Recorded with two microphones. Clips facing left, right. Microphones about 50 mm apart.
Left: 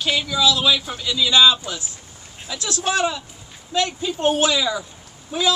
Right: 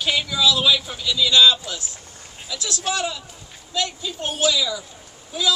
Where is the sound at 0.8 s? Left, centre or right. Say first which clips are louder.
Even; centre.